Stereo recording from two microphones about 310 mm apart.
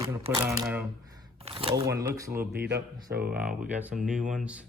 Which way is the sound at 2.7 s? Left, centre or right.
Right.